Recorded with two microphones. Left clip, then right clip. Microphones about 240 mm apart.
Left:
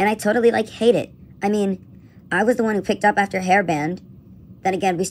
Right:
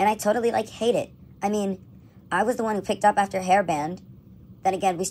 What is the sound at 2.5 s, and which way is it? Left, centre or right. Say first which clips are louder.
A woman's voice: left 5 dB; left.